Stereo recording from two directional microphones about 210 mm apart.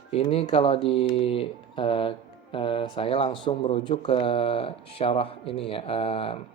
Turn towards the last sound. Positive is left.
turn(degrees=25)  # may be behind; listen again after turning